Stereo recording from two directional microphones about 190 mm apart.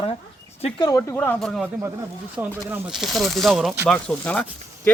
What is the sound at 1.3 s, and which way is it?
Speech, centre (ahead or behind).